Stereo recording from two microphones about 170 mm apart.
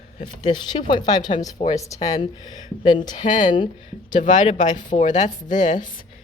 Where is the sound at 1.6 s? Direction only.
35° left (ahead or behind).